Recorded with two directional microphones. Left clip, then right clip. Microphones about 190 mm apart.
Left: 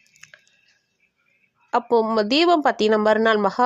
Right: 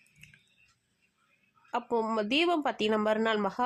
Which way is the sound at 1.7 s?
30° left (ahead or behind).